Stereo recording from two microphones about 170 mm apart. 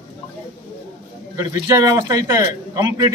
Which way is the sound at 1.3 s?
20° right (ahead or behind).